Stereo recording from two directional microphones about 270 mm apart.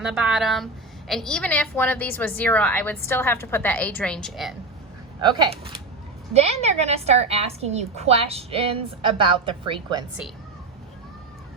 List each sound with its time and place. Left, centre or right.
0.0 s a woman's voice: centre
5.2 s a woman's voice: centre